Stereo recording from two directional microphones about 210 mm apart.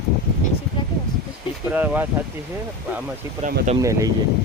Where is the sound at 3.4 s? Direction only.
35° right (ahead or behind).